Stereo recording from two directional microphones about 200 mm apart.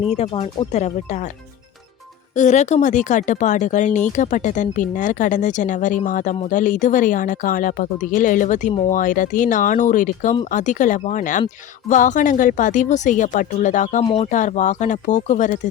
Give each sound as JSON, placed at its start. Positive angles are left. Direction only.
{"t": 0.1, "sound": "speech", "side_deg": 30}
{"t": 2.3, "sound": "speech", "side_deg": 35}
{"t": 14.0, "sound": "speech", "side_deg": 25}
{"t": 14.3, "sound": "speech", "side_deg": 40}